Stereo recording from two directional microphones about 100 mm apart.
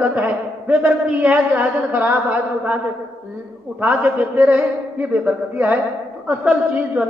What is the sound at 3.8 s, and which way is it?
A man's voice, 15° right (ahead or behind).